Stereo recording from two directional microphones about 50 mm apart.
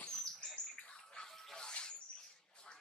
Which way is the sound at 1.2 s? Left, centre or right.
Centre.